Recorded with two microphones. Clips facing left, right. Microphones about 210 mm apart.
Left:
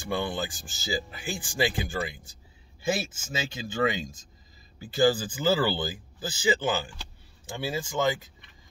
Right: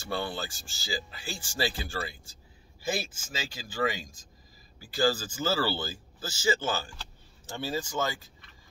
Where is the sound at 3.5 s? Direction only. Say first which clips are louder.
Left 3 dB; 25° left (ahead or behind).